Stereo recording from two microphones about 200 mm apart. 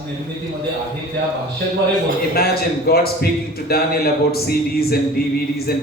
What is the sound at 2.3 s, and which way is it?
Speech, 50° left (ahead or behind).